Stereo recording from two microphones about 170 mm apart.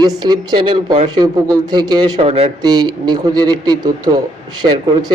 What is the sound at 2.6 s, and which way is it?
Speech, 25° right (ahead or behind).